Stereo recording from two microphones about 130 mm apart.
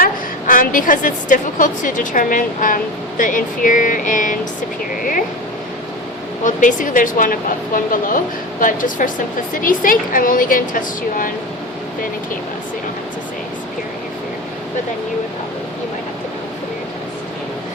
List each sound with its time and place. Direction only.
0.0 s a woman's voice: 90° left
6.4 s a woman's voice: 80° left